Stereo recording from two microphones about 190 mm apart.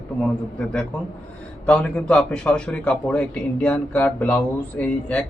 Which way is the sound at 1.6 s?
5° left (ahead or behind).